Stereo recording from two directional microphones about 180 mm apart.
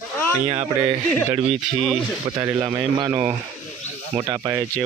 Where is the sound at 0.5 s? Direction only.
35° right (ahead or behind).